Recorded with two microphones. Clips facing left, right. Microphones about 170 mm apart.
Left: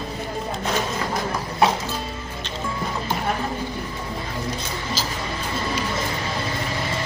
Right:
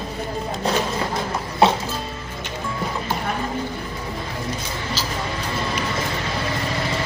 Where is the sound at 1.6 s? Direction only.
25° right (ahead or behind).